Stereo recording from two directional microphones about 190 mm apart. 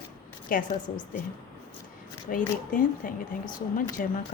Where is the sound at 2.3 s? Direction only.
45° left (ahead or behind).